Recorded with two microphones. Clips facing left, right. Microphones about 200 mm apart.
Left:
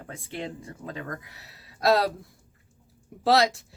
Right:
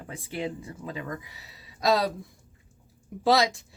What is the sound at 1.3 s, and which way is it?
Speech, 60° left (ahead or behind).